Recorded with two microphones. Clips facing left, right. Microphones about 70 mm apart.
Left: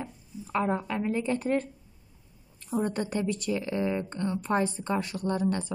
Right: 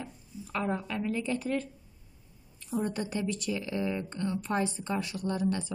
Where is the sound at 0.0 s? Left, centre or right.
Left.